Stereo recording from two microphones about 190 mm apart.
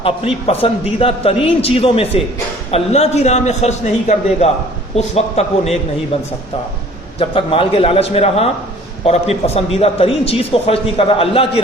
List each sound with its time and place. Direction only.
0.0 s a man's voice: 30° left (ahead or behind)
7.2 s a man's voice: 30° left (ahead or behind)